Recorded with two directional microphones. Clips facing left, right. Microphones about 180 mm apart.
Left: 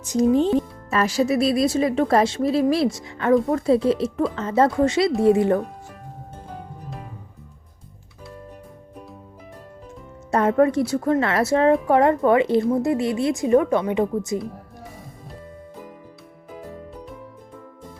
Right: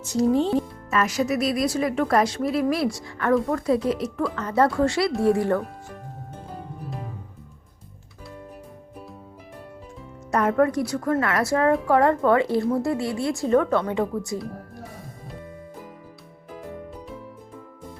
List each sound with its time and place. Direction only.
0.0 s speech: 15° left (ahead or behind)
0.9 s a woman's voice: 30° left (ahead or behind)
10.3 s a woman's voice: 25° left (ahead or behind)